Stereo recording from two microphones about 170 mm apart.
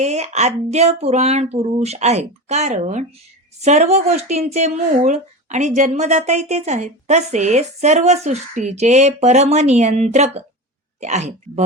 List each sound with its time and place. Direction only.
0.0 s speech: 40° right (ahead or behind)